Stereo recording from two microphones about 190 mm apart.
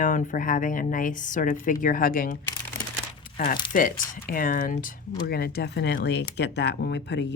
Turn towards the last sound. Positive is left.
turn(degrees=65)  # may be behind; listen again after turning